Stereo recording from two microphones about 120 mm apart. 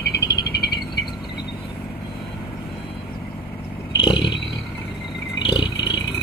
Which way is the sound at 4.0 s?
40° left (ahead or behind).